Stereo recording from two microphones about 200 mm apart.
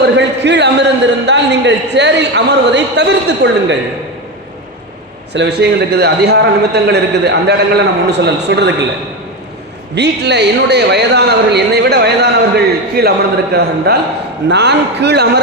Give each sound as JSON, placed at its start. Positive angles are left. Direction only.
{"t": 0.0, "sound": "a man's voice", "side_deg": -60}
{"t": 5.3, "sound": "a man's voice", "side_deg": -55}
{"t": 9.9, "sound": "a man's voice", "side_deg": -55}